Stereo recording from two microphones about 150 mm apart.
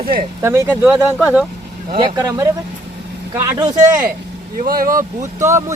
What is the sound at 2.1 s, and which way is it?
Speech, 25° right (ahead or behind).